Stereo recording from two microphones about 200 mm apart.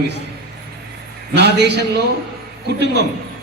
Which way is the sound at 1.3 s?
55° right (ahead or behind).